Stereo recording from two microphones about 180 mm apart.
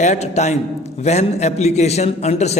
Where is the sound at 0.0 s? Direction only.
40° left (ahead or behind).